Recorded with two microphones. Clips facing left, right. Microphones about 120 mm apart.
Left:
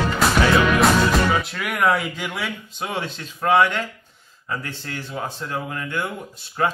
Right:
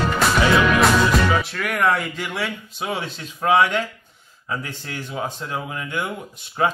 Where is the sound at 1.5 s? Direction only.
Centre (ahead or behind).